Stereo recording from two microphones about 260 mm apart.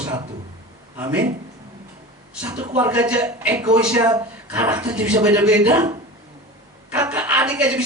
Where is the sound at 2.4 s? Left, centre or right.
Centre.